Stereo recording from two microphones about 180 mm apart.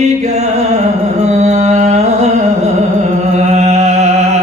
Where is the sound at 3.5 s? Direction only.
40° right (ahead or behind).